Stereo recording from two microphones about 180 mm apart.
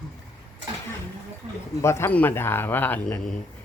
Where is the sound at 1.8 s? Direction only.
15° left (ahead or behind).